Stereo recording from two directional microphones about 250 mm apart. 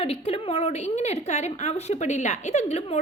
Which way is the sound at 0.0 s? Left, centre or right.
Left.